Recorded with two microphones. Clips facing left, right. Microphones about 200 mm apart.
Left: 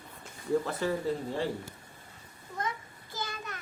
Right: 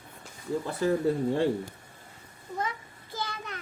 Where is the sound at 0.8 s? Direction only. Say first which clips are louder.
Right 5 dB; 50° right (ahead or behind).